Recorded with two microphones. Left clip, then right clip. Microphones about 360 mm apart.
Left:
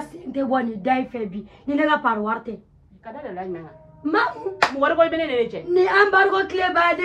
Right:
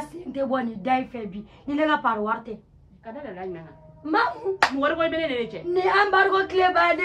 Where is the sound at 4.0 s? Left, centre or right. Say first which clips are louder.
Left 2 dB; right.